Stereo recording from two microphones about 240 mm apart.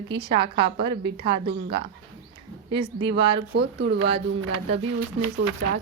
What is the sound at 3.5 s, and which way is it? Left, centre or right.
Speech, right.